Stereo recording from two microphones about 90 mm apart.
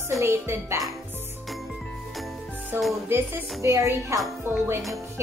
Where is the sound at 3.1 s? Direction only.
25° right (ahead or behind).